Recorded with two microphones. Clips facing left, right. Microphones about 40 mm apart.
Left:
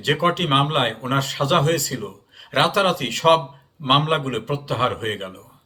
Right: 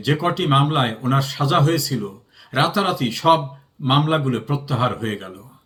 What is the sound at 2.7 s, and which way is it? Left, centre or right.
A man's voice, left.